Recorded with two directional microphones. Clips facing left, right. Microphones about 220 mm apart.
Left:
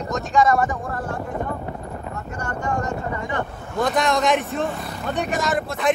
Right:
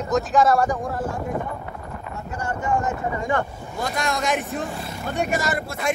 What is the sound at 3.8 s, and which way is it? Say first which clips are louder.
A woman's voice: left 5 dB; centre (ahead or behind).